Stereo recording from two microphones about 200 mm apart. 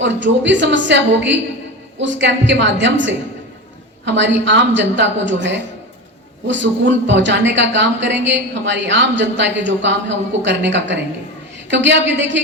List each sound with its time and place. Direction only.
0.0 s speech: 65° right (ahead or behind)